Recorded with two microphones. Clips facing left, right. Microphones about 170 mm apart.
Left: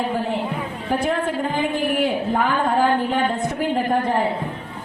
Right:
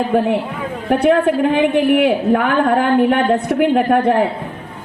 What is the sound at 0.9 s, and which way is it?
A man's voice, 65° right (ahead or behind).